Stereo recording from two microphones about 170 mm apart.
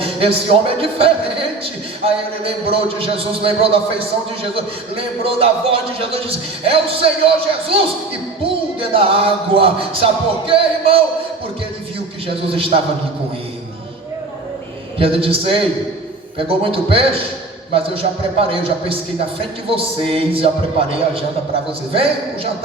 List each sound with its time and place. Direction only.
0.0 s a man's voice: 35° right (ahead or behind)
12.5 s a man's voice: 35° right (ahead or behind)
14.9 s a man's voice: 35° right (ahead or behind)